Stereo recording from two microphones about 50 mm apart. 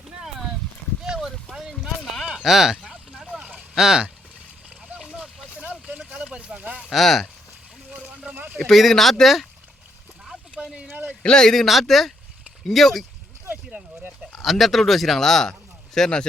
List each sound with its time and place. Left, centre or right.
1.0 s a sound: centre
3.8 s speech: centre
5.5 s vehicle: right
6.1 s a sound: right
6.9 s speech: centre
8.5 s speech: centre
11.2 s a man's voice: centre
11.6 s speech: centre
13.7 s a sound: right
14.4 s a man's voice: centre